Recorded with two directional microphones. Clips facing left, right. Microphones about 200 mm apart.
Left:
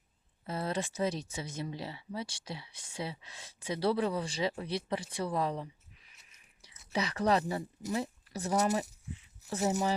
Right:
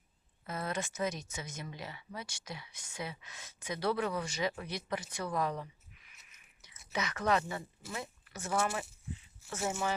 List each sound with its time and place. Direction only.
0.4 s speech: 30° left (ahead or behind)